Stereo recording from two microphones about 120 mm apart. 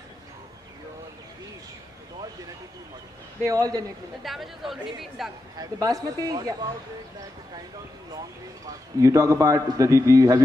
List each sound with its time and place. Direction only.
3.4 s a man's voice: 30° right (ahead or behind)
4.2 s a woman's voice: centre (ahead or behind)
5.6 s speech: 30° right (ahead or behind)
8.6 s a man's voice: 30° right (ahead or behind)